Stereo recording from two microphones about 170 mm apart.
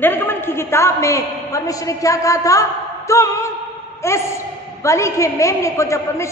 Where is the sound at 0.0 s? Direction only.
10° left (ahead or behind).